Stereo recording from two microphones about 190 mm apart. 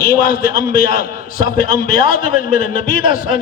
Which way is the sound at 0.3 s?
50° left (ahead or behind).